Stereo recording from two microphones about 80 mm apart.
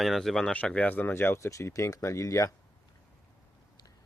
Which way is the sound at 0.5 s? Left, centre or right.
Centre.